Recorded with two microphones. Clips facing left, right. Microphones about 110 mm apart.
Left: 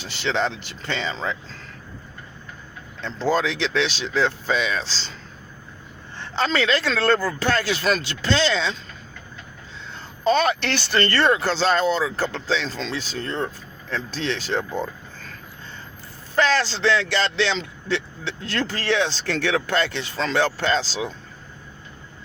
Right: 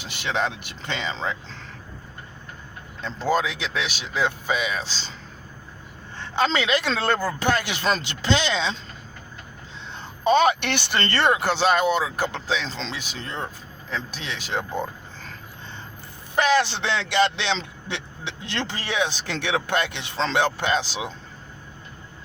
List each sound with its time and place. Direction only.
0.0 s speech: 15° right (ahead or behind)
3.0 s speech: 15° right (ahead or behind)
6.3 s speech: 20° right (ahead or behind)
10.2 s speech: 20° right (ahead or behind)
16.3 s speech: 15° right (ahead or behind)